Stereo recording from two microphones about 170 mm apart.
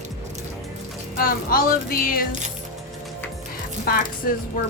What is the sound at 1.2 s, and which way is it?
Speech, 60° left (ahead or behind).